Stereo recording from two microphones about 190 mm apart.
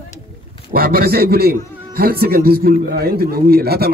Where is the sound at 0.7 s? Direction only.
55° right (ahead or behind).